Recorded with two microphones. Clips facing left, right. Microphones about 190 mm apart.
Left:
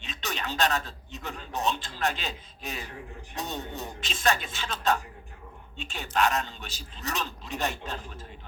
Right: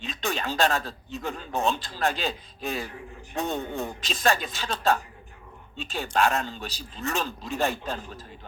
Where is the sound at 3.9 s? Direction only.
40° right (ahead or behind).